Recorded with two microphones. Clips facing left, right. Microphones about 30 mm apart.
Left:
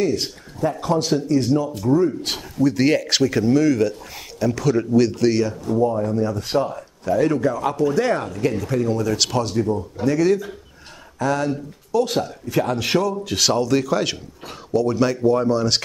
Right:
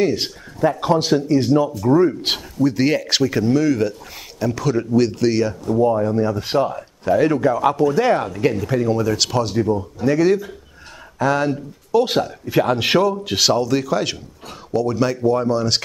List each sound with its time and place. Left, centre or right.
0.0 s speech: right
2.6 s speech: centre
5.7 s speech: right
13.5 s speech: centre